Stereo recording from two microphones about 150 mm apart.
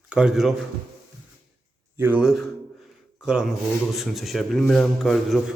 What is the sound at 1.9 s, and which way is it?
A man's voice, 10° right (ahead or behind).